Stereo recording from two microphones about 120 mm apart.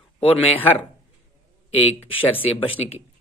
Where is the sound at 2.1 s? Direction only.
50° left (ahead or behind).